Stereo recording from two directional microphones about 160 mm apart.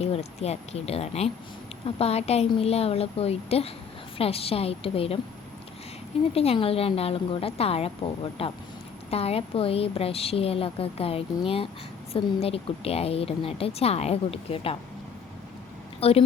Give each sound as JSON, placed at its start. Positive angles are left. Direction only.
{"t": 0.0, "sound": "a woman's voice", "side_deg": 40}
{"t": 6.3, "sound": "a woman's voice", "side_deg": 40}
{"t": 16.0, "sound": "a woman's voice", "side_deg": 35}